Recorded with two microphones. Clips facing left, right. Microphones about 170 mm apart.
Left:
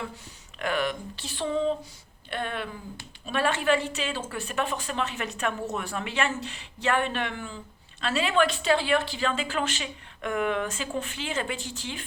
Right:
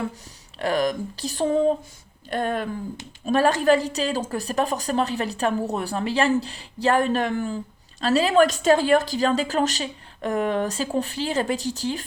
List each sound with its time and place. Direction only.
0.6 s a woman's voice: 35° right (ahead or behind)